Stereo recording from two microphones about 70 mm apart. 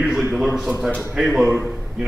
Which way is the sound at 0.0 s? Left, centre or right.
Centre.